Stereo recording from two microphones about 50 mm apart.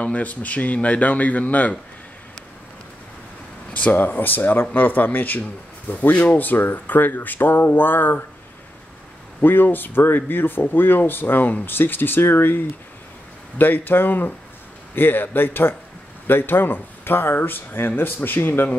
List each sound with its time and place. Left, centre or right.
0.0 s speech: left
3.7 s speech: left
9.4 s speech: left